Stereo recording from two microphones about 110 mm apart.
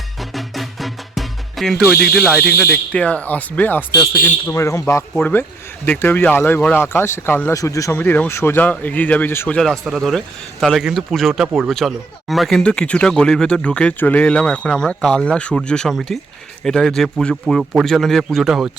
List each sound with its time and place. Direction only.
0.2 s music: centre (ahead or behind)
1.9 s speech: 5° left (ahead or behind); by 7.9 s 30° left (ahead or behind)
7.9 s speech: 15° left (ahead or behind)
9.5 s speech: 5° left (ahead or behind)